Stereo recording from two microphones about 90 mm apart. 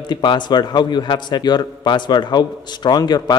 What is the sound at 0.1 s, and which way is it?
A man's voice, 60° left (ahead or behind).